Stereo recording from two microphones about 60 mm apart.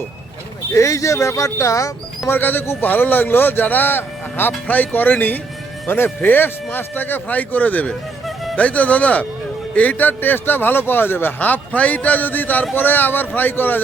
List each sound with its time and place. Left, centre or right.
0.7 s speech: left
2.3 s speech: left